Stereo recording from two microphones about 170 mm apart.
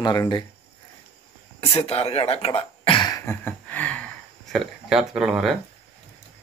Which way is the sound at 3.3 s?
10° left (ahead or behind).